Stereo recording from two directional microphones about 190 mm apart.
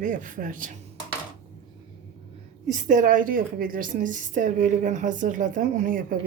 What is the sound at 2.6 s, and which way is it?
A woman's voice, 40° right (ahead or behind).